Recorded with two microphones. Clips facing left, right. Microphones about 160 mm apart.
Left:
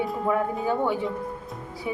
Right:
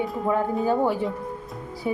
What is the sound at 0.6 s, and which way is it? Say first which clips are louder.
Speech: right 3 dB; 35° right (ahead or behind).